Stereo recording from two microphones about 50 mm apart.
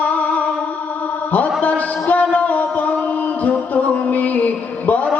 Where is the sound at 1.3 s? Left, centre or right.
Left.